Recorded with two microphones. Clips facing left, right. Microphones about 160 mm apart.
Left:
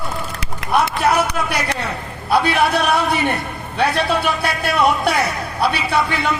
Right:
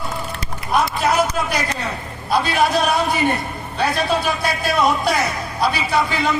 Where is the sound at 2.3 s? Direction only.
60° left (ahead or behind).